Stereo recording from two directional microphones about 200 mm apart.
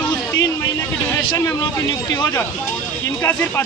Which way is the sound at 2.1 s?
15° left (ahead or behind).